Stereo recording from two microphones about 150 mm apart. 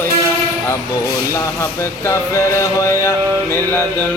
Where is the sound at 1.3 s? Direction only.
20° left (ahead or behind).